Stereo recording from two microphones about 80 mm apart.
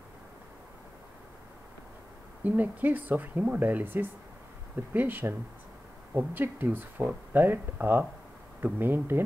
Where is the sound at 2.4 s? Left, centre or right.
Right.